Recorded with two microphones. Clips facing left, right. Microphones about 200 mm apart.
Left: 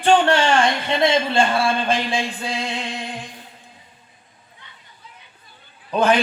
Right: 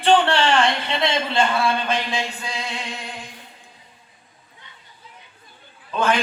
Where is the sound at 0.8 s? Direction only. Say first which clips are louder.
Left 4 dB; 50° left (ahead or behind).